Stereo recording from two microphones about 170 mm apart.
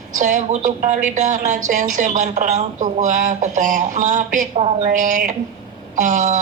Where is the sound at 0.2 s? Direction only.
50° right (ahead or behind).